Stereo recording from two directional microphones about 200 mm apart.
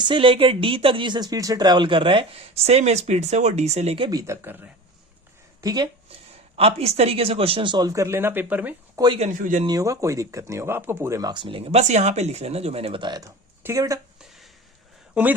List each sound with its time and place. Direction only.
0.0 s speech: 25° right (ahead or behind); by 4.7 s 10° right (ahead or behind)
5.6 s speech: 20° right (ahead or behind)
9.0 s speech: 30° right (ahead or behind)
9.6 s speech: 15° right (ahead or behind)
14.2 s a sound: centre (ahead or behind)
15.1 s speech: 10° right (ahead or behind)